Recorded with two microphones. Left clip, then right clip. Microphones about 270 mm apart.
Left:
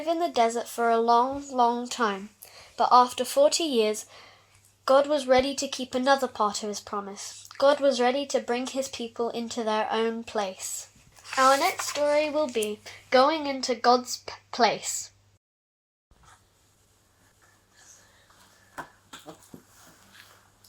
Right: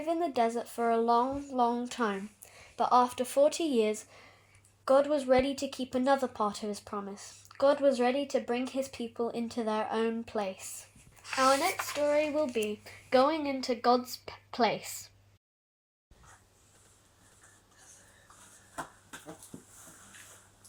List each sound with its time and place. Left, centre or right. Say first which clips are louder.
0.0 s speech: left 5 dB; left